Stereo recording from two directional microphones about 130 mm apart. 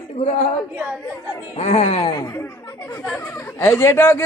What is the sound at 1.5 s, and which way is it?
Speech, 55° left (ahead or behind).